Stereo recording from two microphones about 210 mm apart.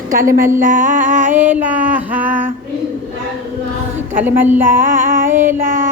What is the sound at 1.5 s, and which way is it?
Female singing, 10° right (ahead or behind).